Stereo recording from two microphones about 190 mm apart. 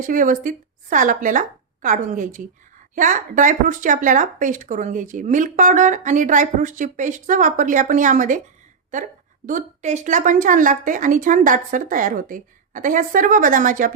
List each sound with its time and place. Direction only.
0.0 s a woman's voice: 45° right (ahead or behind)